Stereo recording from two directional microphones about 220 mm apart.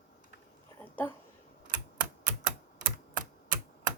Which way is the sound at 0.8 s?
10° left (ahead or behind).